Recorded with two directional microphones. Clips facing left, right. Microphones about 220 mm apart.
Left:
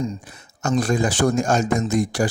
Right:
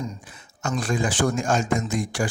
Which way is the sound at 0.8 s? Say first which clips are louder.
Left 4 dB; 40° left (ahead or behind).